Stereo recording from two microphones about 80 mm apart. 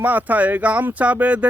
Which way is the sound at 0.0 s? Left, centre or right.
Right.